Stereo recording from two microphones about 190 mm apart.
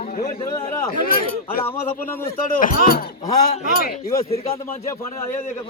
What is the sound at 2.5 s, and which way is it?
Speech, 45° left (ahead or behind).